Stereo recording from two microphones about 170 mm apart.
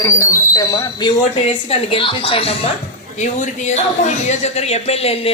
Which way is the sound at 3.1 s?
45° left (ahead or behind).